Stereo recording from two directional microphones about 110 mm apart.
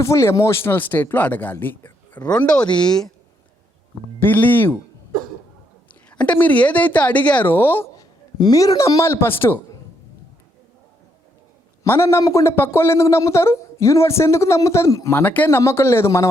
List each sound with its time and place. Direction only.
0.0 s a woman's voice: 25° left (ahead or behind); by 3.1 s 5° left (ahead or behind)
4.2 s speech: 15° left (ahead or behind)
5.9 s a woman's voice: 10° left (ahead or behind)
7.9 s a man's voice: 35° left (ahead or behind)
11.8 s speech: 25° left (ahead or behind)
15.2 s speech: 15° left (ahead or behind)